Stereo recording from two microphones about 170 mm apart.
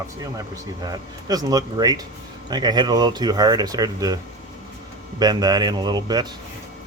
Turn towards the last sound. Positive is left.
turn(degrees=-25)  # may be behind; listen again after turning